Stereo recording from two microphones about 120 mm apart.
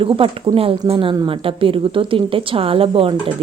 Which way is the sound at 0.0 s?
50° right (ahead or behind).